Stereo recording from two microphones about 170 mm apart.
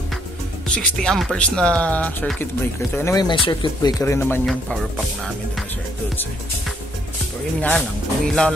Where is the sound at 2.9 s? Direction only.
20° left (ahead or behind).